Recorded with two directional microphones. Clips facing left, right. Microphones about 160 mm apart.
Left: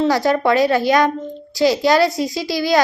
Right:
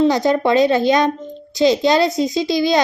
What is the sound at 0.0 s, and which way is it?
A child's voice, 20° right (ahead or behind).